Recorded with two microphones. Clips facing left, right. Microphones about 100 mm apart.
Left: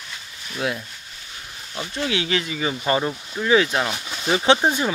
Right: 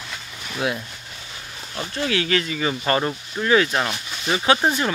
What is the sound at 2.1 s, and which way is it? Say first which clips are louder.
Speech: right 3 dB; 15° left (ahead or behind).